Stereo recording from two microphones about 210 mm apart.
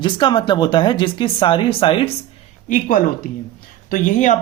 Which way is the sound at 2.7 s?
40° left (ahead or behind).